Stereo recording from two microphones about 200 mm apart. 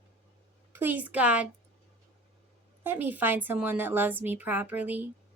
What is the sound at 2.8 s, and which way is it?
Speech, 10° right (ahead or behind).